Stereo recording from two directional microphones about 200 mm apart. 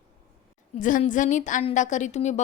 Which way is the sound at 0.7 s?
40° left (ahead or behind).